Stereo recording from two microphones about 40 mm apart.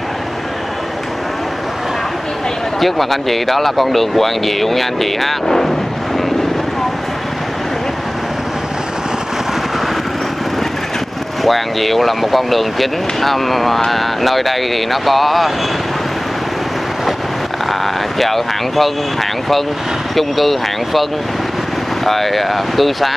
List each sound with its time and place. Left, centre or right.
2.8 s speech: centre
11.4 s speech: centre
18.2 s speech: centre
20.2 s speech: centre